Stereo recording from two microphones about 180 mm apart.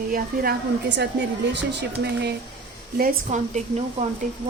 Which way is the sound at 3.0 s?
40° right (ahead or behind).